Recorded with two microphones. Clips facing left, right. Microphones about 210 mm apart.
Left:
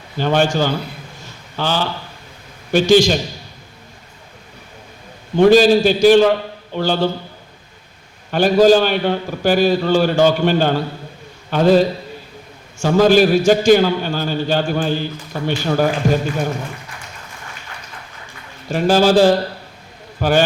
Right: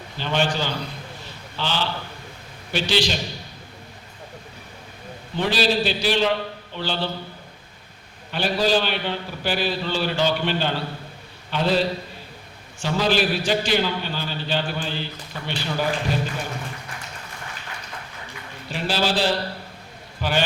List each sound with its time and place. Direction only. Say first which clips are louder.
0.2 s a man's voice: left 8 dB; 45° left (ahead or behind)
1.2 s a sound: left 8 dB; 45° left (ahead or behind)
2.7 s a man's voice: left 11 dB; 45° left (ahead or behind)
5.4 s a man's voice: left 12 dB; 45° left (ahead or behind)
8.3 s a man's voice: left 10 dB; 45° left (ahead or behind)
18.7 s a man's voice: left 11 dB; 45° left (ahead or behind)